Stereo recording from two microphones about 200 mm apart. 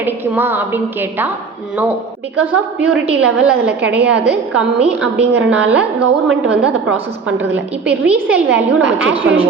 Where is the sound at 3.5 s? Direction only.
55° right (ahead or behind).